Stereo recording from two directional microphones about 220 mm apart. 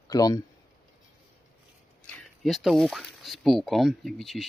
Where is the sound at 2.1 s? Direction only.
Centre (ahead or behind).